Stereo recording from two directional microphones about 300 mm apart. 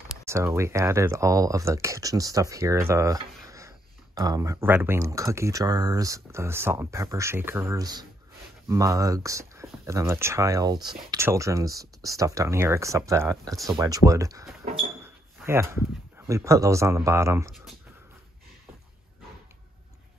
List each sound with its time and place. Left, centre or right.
0.2 s speech: centre